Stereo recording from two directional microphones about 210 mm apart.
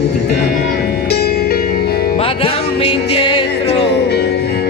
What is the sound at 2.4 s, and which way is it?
Music, 30° left (ahead or behind).